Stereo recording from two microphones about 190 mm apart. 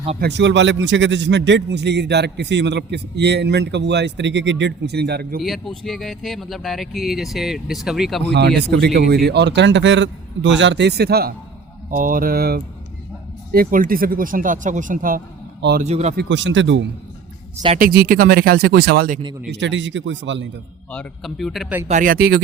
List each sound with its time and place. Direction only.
0.2 s a man's voice: 65° right (ahead or behind)
5.4 s speech: centre (ahead or behind)
8.2 s a man's voice: 60° right (ahead or behind); by 16.1 s 35° right (ahead or behind)
16.1 s speech: 70° right (ahead or behind)
17.7 s speech: 50° right (ahead or behind)
19.5 s speech: 70° right (ahead or behind)
20.9 s speech: 5° left (ahead or behind)
21.8 s speech: 45° right (ahead or behind)